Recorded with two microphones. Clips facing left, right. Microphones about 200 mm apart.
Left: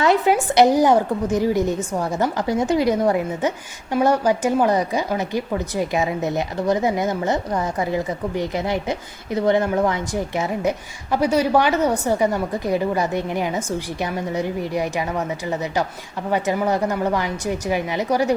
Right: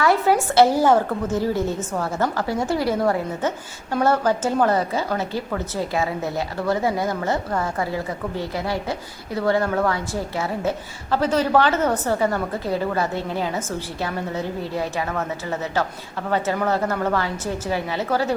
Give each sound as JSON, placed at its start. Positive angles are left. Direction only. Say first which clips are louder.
{"t": 0.0, "sound": "speech", "louder": "left 1 dB", "side_deg": 20}